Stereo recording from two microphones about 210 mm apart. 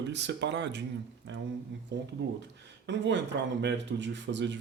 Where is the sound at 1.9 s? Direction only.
55° right (ahead or behind).